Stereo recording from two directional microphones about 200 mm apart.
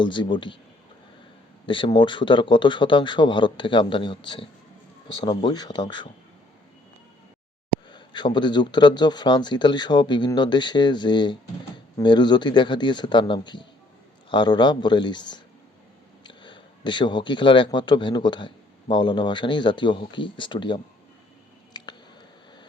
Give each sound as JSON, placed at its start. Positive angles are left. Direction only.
{"t": 0.0, "sound": "speech", "side_deg": 25}
{"t": 1.6, "sound": "speech", "side_deg": 25}
{"t": 7.9, "sound": "a man's voice", "side_deg": 20}
{"t": 21.7, "sound": "a sound", "side_deg": 20}